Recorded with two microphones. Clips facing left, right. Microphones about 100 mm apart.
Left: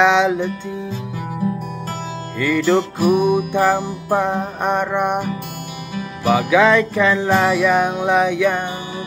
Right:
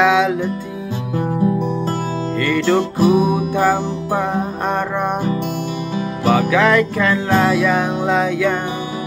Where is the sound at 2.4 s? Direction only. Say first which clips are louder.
Left 1 dB; 5° left (ahead or behind).